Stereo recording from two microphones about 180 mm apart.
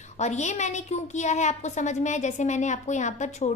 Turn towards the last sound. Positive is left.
turn(degrees=40)  # may be behind; listen again after turning